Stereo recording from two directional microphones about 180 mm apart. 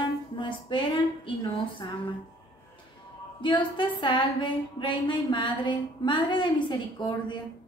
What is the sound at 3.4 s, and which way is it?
A woman's voice, 25° left (ahead or behind).